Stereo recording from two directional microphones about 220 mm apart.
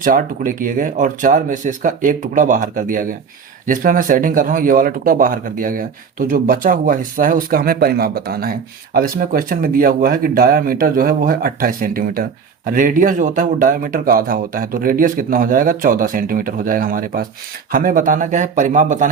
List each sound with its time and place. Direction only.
0.0 s speech: 40° right (ahead or behind)